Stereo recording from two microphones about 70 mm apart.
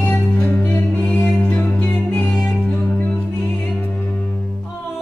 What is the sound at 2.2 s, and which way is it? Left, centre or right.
Music, centre.